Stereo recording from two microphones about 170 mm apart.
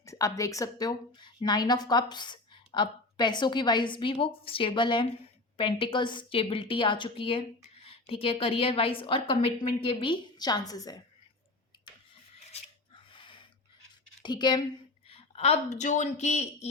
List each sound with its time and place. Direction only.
0.0 s a woman's voice: 20° left (ahead or behind)
12.5 s a sound: 30° left (ahead or behind)
14.2 s a woman's voice: 25° left (ahead or behind)
15.1 s speech: 40° left (ahead or behind)